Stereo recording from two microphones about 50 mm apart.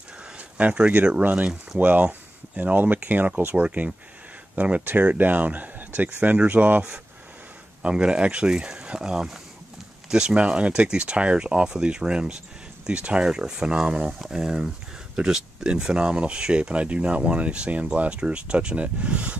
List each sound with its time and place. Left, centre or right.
0.4 s a sound: right
1.2 s speech: right
7.8 s speech: centre